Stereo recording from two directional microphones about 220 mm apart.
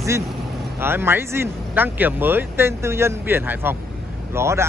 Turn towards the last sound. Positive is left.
turn(degrees=-10)  # may be behind; listen again after turning